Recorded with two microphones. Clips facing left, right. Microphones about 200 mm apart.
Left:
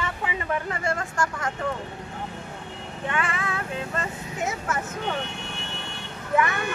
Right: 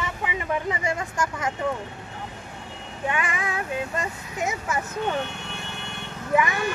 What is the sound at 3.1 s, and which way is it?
Speech, 15° right (ahead or behind).